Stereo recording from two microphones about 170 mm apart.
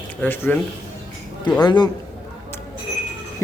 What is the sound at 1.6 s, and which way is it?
Speech, 25° left (ahead or behind).